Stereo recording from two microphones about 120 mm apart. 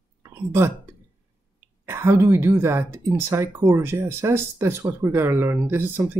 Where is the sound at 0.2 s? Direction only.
25° right (ahead or behind).